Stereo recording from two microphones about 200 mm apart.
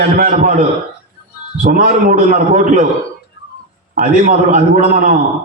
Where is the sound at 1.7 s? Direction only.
45° right (ahead or behind).